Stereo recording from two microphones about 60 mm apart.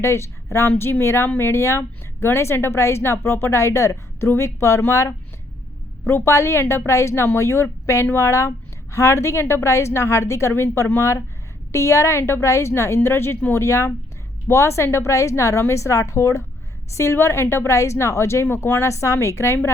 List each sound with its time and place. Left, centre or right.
0.0 s a woman's voice: left
6.1 s a woman's voice: left
16.9 s a woman's voice: left